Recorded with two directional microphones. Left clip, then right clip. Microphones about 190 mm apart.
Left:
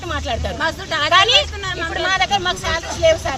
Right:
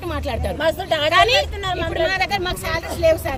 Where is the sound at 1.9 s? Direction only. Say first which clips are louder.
Left 4 dB; 20° right (ahead or behind).